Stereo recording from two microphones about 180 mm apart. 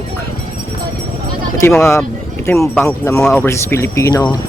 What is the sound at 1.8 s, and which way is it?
A man's voice, 15° left (ahead or behind).